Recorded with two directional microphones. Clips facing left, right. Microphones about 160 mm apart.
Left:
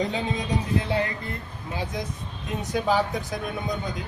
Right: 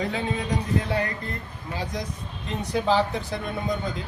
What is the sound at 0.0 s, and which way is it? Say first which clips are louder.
Speech: even; 20° left (ahead or behind).